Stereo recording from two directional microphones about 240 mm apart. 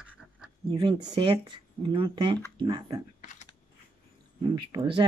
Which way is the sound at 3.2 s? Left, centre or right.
Left.